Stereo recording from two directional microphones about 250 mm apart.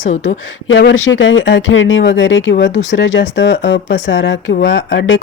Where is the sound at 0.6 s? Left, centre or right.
Left.